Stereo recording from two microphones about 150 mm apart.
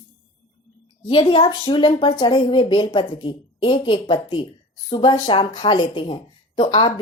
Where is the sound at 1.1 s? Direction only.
30° left (ahead or behind).